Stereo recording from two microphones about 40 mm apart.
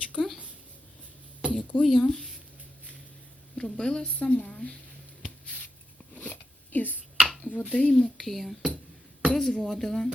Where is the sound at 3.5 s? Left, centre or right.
Centre.